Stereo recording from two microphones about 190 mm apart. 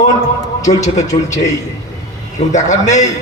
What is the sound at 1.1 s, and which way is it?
Speech, 20° left (ahead or behind).